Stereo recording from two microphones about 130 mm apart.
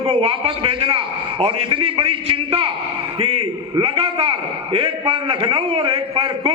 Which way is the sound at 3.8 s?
45° right (ahead or behind).